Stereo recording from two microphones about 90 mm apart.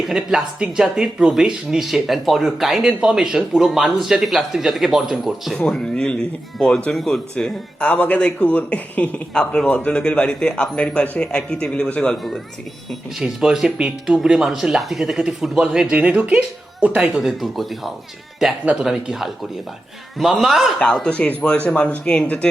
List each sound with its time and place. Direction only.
0.0 s speech: 5° right (ahead or behind)
5.6 s speech: 10° left (ahead or behind)
12.9 s speech: 5° right (ahead or behind)
17.2 s speech: centre (ahead or behind)
18.6 s speech: 15° right (ahead or behind)
18.9 s speech: 5° right (ahead or behind)
20.7 s speech: 10° left (ahead or behind)